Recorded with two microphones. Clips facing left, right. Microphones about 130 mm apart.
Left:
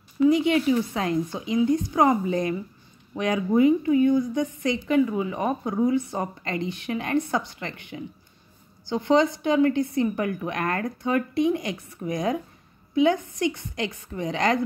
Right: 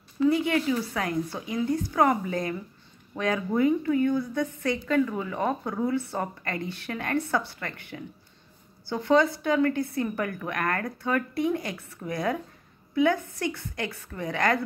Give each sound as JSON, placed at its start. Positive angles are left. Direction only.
{"t": 0.2, "sound": "a woman's voice", "side_deg": 20}